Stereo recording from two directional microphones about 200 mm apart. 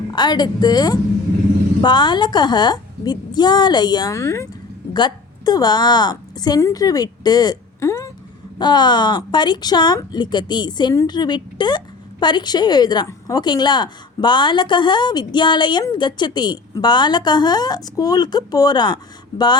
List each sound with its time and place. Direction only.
0.1 s a woman's voice: 20° left (ahead or behind)